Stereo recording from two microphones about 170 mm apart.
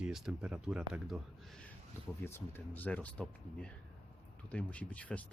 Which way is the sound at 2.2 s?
10° left (ahead or behind).